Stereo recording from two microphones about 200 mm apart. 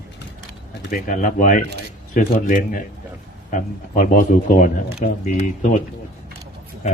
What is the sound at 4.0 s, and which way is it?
Speech, 40° left (ahead or behind).